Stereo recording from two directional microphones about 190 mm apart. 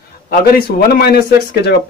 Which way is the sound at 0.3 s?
55° left (ahead or behind).